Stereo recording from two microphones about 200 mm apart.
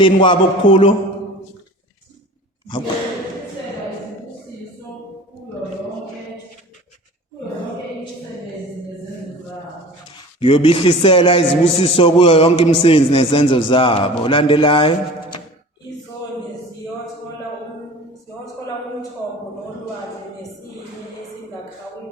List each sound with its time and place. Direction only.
0.0 s a man's voice: 25° left (ahead or behind)
2.6 s speech: 25° left (ahead or behind)
10.4 s a man's voice: 25° left (ahead or behind)